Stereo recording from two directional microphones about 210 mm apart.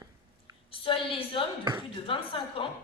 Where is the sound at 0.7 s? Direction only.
25° left (ahead or behind).